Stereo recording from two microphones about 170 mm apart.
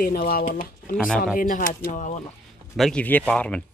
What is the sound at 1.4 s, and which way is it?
Speech, 55° left (ahead or behind).